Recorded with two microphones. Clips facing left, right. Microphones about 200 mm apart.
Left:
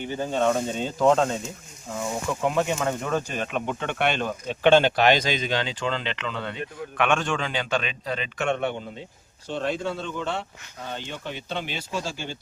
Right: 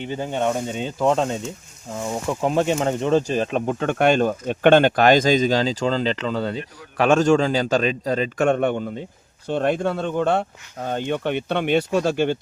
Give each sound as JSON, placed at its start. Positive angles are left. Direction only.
{"t": 0.0, "sound": "speech", "side_deg": -20}
{"t": 2.4, "sound": "speech", "side_deg": -35}